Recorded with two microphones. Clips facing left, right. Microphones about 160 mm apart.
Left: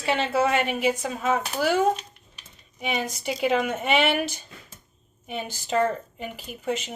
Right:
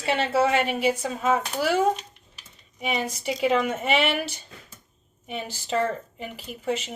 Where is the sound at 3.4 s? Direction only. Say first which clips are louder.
Right 1 dB; 30° right (ahead or behind).